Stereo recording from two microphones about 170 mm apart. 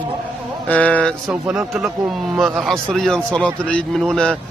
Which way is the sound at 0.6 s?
10° left (ahead or behind).